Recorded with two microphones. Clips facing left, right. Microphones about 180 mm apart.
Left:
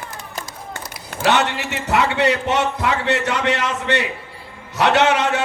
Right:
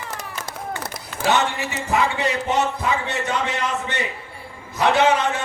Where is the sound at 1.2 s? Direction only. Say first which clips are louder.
Left 2 dB; 75° left (ahead or behind).